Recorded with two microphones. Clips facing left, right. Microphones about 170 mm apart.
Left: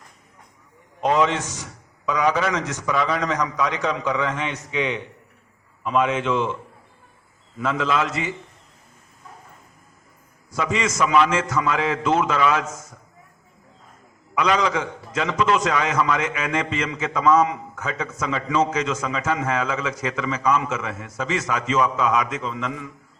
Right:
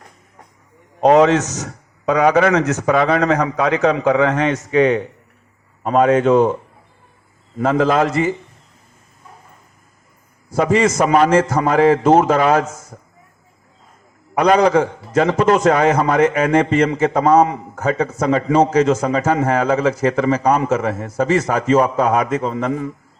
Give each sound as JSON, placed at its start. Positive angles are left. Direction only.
{"t": 1.4, "sound": "speech", "side_deg": -75}
{"t": 2.0, "sound": "a man's voice", "side_deg": -65}
{"t": 7.6, "sound": "a man's voice", "side_deg": -45}
{"t": 10.6, "sound": "a man's voice", "side_deg": -45}
{"t": 14.3, "sound": "a man's voice", "side_deg": -40}